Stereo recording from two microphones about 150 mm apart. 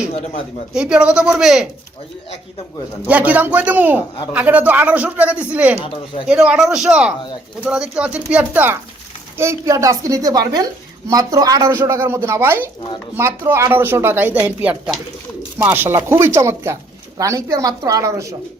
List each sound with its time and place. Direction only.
0.7 s speech: 5° right (ahead or behind)
3.1 s a man's voice: 10° right (ahead or behind)